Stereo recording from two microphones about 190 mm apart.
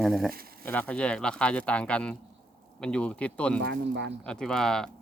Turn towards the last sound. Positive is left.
turn(degrees=5)  # may be behind; listen again after turning